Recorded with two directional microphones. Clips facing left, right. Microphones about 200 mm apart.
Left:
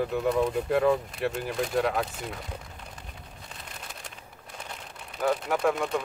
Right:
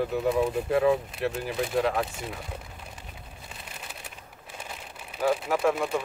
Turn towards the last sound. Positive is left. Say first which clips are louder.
# right 1 dB
turn(degrees=-5)  # may be behind; listen again after turning